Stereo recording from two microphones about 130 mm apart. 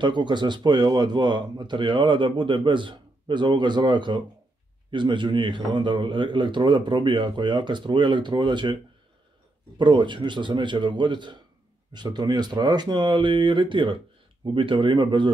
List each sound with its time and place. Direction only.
0.0 s speech: 35° right (ahead or behind)
9.8 s speech: 35° right (ahead or behind)